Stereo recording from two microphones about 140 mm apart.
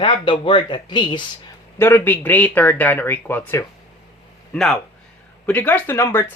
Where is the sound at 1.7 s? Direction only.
15° left (ahead or behind).